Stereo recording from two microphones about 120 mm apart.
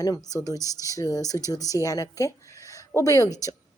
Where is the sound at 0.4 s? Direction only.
30° left (ahead or behind).